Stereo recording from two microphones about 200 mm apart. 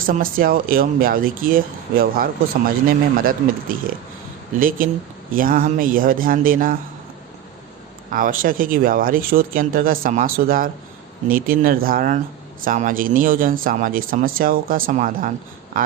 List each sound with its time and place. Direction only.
0.0 s speech: 45° right (ahead or behind)
8.1 s speech: 45° right (ahead or behind)